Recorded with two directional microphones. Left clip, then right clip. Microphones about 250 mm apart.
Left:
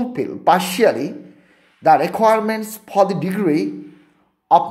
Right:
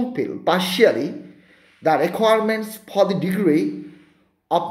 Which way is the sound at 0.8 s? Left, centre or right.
Centre.